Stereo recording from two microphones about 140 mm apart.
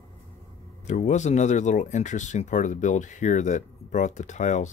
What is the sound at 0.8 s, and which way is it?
Speech, 55° left (ahead or behind).